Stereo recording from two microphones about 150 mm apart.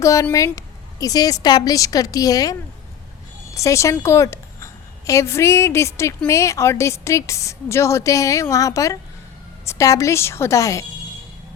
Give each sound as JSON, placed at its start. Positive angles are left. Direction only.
{"t": 0.0, "sound": "a woman's voice", "side_deg": 20}